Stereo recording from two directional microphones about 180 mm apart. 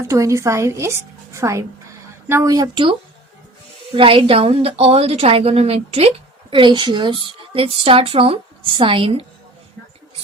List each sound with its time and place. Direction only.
0.1 s a woman's voice: 15° right (ahead or behind)
3.9 s a woman's voice: 30° right (ahead or behind)